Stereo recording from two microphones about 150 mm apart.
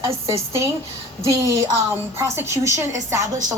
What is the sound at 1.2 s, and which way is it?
A woman's voice, 20° right (ahead or behind).